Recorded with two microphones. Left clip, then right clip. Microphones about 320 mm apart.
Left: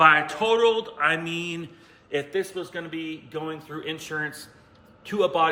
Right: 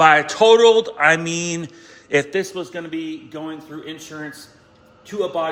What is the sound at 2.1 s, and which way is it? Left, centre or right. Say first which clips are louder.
A man's voice: right 8 dB; right.